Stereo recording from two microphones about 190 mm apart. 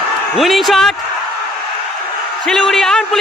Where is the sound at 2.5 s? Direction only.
Centre (ahead or behind).